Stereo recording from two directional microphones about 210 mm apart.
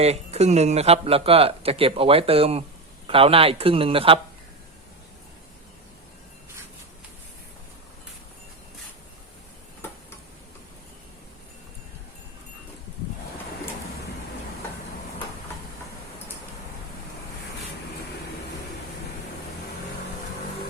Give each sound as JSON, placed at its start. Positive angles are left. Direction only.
{"t": 0.0, "sound": "speech", "side_deg": -30}